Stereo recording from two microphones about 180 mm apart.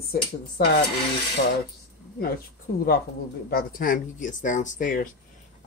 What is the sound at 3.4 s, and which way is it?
Speech, 55° left (ahead or behind).